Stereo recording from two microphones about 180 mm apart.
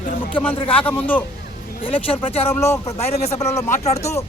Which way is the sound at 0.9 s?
10° left (ahead or behind).